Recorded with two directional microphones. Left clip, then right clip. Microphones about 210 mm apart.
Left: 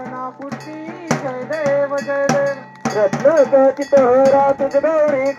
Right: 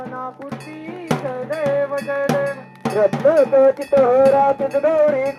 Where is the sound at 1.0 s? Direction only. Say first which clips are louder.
Left 1 dB; 20° left (ahead or behind).